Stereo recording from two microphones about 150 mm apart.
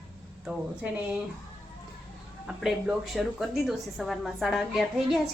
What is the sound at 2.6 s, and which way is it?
A woman's voice, 5° right (ahead or behind).